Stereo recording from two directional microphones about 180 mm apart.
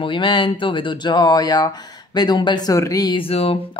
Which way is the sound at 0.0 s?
25° left (ahead or behind).